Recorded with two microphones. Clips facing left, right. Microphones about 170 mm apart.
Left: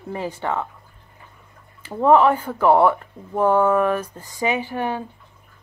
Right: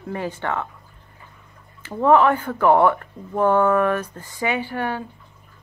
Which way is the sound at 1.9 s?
10° left (ahead or behind).